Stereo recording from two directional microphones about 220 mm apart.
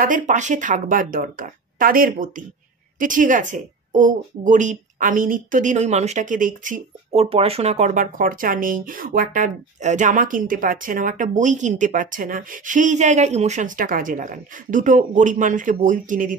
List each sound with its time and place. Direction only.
0.0 s a woman's voice: 35° right (ahead or behind)